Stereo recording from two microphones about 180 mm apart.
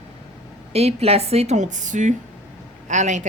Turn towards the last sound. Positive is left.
turn(degrees=-40)  # may be behind; listen again after turning